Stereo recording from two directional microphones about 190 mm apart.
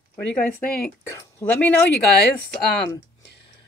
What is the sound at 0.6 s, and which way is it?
Speech, 50° left (ahead or behind).